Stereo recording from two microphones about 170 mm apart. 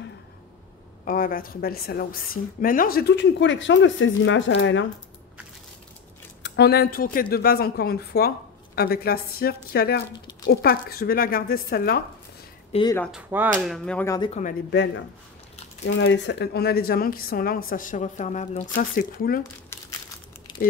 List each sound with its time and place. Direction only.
1.0 s a woman's voice: 55° left (ahead or behind); by 4.8 s 90° left
6.4 s a woman's voice: 85° left; by 12.0 s 60° left (ahead or behind)
12.7 s speech: 40° left (ahead or behind)
13.1 s speech: 10° right (ahead or behind)
13.7 s speech: 5° left (ahead or behind)
14.0 s speech: 20° left (ahead or behind)
16.0 s a woman's voice: 90° left; by 19.4 s 60° left (ahead or behind)
19.7 s crumpling: 15° left (ahead or behind)